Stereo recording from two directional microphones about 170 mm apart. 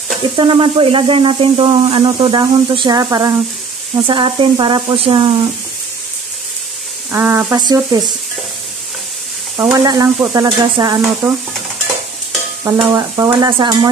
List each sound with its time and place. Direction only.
0.4 s speech: 30° right (ahead or behind)
7.1 s speech: 15° right (ahead or behind)
7.5 s speech: 25° right (ahead or behind)
9.6 s speech: 20° right (ahead or behind)
11.2 s speech: 10° right (ahead or behind)
12.9 s speech: 20° right (ahead or behind)